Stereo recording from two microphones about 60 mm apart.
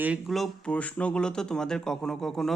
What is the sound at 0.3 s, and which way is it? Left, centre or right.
Speech, centre.